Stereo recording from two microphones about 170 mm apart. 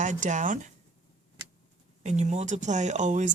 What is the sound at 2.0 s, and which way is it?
Speech, 40° right (ahead or behind).